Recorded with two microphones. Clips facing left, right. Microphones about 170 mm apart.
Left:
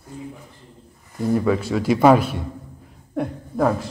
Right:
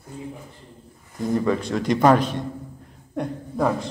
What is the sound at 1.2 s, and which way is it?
Speech, 5° left (ahead or behind).